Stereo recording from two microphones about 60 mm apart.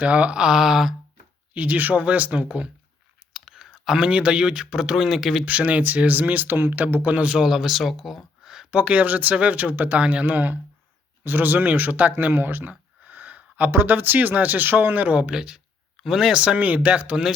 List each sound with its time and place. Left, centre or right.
0.0 s speech: right; by 0.9 s centre
1.5 s speech: right
3.3 s speech: centre
5.5 s speech: right
7.4 s speech: centre
8.7 s speech: right
10.2 s speech: right
12.1 s a sound: right
13.7 s speech: right; by 17.2 s centre